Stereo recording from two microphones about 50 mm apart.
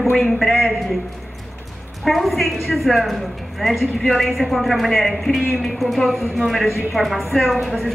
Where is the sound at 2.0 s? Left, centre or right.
Centre.